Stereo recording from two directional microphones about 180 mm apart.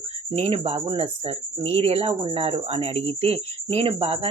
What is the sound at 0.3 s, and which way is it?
Speech, 35° right (ahead or behind).